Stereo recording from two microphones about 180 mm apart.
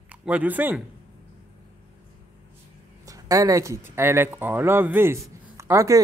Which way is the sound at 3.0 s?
20° right (ahead or behind).